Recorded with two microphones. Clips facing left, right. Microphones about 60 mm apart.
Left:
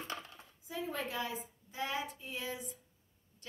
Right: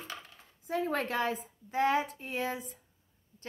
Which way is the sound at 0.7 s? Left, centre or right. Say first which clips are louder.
Right 8 dB; right.